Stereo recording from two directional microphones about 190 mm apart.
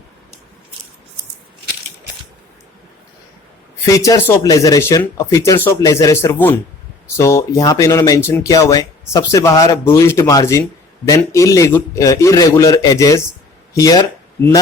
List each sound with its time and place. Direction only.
3.8 s speech: 15° left (ahead or behind)